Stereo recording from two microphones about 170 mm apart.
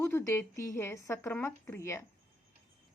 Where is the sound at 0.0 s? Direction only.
15° left (ahead or behind).